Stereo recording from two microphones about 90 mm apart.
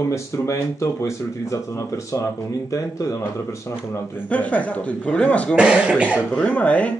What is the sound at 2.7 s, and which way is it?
Speech, 40° left (ahead or behind).